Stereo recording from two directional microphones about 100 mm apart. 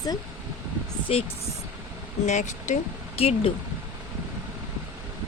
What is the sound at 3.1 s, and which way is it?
Speech, 90° left.